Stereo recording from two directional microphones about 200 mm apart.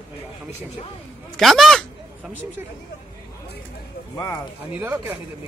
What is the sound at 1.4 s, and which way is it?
Speech, centre (ahead or behind).